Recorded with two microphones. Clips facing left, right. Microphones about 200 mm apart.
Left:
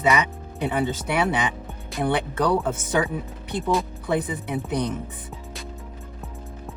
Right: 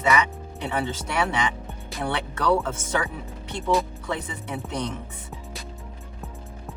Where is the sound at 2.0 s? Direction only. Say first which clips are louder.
Left 5 dB; 15° left (ahead or behind).